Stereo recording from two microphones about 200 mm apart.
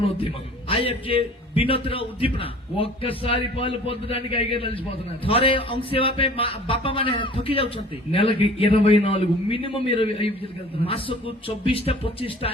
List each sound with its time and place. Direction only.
0.0 s a man's voice: 25° left (ahead or behind)